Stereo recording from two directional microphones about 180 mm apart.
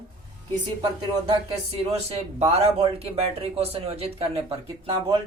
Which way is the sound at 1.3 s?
35° right (ahead or behind).